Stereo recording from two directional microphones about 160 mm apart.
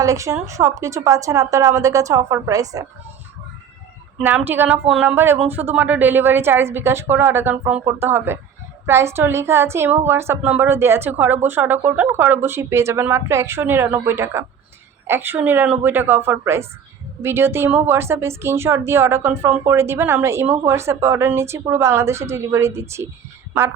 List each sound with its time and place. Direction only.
0.0 s a woman's voice: 20° right (ahead or behind)
4.2 s a woman's voice: 10° right (ahead or behind)